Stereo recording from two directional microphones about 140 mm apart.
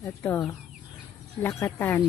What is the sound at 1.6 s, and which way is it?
Speech, 15° left (ahead or behind).